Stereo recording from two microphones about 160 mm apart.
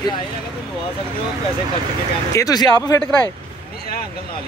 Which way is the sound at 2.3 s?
20° left (ahead or behind).